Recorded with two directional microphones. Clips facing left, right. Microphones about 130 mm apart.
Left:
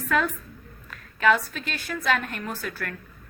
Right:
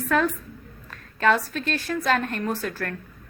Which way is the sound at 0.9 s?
35° right (ahead or behind).